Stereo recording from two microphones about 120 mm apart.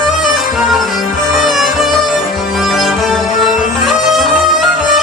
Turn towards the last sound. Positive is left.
turn(degrees=0)  # may be behind; listen again after turning